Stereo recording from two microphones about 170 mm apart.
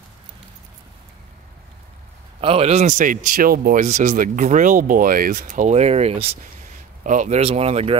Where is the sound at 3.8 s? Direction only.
45° right (ahead or behind).